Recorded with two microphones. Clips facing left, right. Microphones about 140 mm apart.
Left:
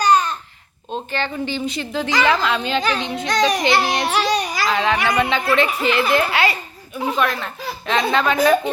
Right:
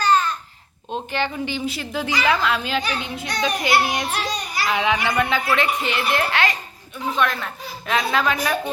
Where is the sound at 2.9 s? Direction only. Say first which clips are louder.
Left 6 dB; 90° left.